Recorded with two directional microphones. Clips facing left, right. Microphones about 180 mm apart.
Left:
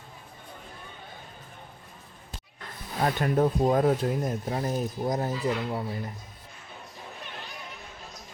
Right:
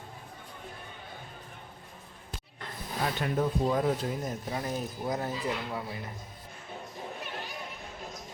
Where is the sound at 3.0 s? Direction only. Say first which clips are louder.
Left 5 dB; 50° left (ahead or behind).